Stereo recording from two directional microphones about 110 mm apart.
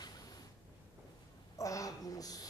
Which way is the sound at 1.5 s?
30° left (ahead or behind).